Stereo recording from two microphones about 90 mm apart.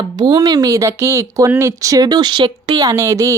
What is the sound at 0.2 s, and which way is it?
Speech, 45° right (ahead or behind).